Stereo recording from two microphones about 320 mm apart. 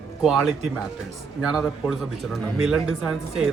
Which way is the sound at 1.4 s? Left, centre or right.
Centre.